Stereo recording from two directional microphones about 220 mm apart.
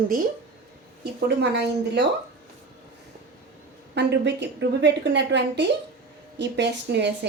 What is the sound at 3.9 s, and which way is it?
A woman's voice, 50° right (ahead or behind).